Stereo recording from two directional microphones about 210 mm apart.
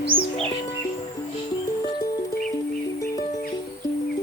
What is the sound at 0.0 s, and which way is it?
Music, 5° right (ahead or behind).